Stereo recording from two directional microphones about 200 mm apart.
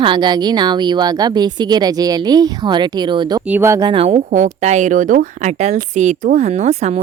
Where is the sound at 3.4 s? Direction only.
10° right (ahead or behind).